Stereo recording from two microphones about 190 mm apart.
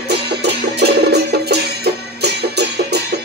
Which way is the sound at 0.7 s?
60° right (ahead or behind).